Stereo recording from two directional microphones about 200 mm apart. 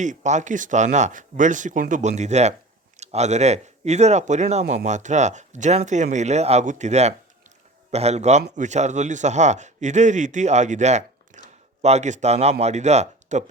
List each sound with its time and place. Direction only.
0.0 s speech: 35° right (ahead or behind)